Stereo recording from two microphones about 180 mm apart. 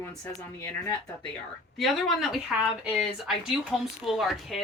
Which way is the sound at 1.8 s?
Centre (ahead or behind).